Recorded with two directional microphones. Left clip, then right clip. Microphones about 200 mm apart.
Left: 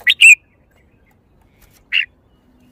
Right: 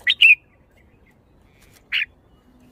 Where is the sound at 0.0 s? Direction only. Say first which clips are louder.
Left 6 dB; 40° left (ahead or behind).